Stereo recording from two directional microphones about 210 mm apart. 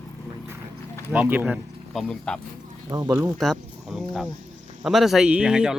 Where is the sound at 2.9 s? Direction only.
15° right (ahead or behind).